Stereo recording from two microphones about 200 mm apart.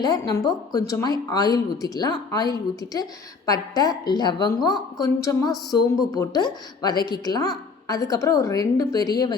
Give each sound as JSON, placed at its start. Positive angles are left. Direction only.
{"t": 0.0, "sound": "a woman's voice", "side_deg": 20}